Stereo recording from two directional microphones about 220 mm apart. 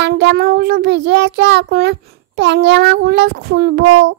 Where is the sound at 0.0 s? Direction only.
50° right (ahead or behind).